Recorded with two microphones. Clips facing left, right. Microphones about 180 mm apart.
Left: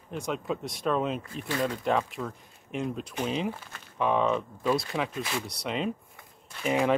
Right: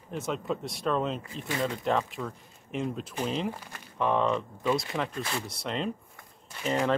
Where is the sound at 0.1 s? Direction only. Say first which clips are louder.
Even; centre (ahead or behind).